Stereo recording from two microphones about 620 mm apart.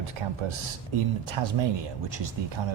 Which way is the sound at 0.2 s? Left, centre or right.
Right.